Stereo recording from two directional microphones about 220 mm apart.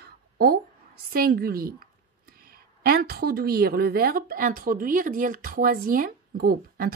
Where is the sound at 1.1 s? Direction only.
45° right (ahead or behind).